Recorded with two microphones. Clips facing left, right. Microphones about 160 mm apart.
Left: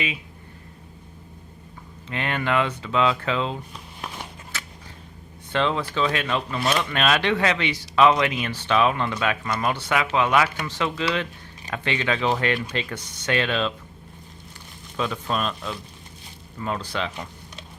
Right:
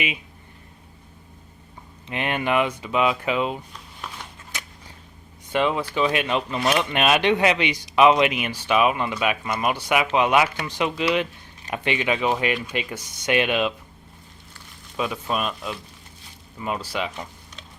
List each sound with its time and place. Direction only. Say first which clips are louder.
2.0 s speech: right 1 dB; 15° right (ahead or behind)
4.5 s a sound: even; 15° right (ahead or behind)
5.5 s speech: right 1 dB; 10° right (ahead or behind)
14.9 s speech: even; 10° right (ahead or behind)